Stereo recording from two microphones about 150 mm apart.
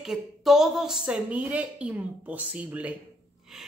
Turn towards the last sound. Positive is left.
turn(degrees=0)  # may be behind; listen again after turning